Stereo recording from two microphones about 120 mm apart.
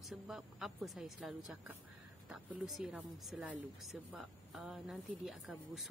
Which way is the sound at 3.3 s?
10° right (ahead or behind).